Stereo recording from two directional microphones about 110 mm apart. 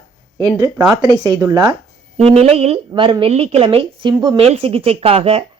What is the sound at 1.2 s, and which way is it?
Speech, 40° right (ahead or behind).